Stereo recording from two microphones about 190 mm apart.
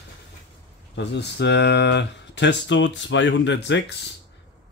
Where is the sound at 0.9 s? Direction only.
65° left (ahead or behind).